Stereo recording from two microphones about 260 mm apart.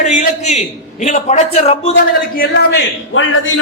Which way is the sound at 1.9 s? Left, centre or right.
Left.